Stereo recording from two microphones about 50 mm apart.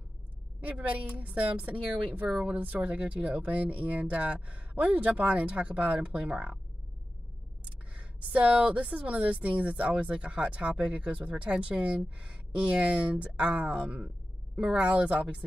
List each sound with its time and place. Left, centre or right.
0.6 s a woman's voice: right
7.9 s speech: right